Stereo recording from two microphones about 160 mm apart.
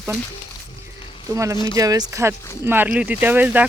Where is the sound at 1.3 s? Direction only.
20° right (ahead or behind).